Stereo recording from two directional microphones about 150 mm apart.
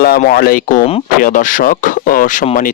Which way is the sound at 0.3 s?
85° left.